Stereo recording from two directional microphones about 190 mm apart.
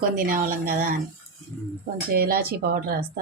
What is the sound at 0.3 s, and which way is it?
Speech, 50° right (ahead or behind).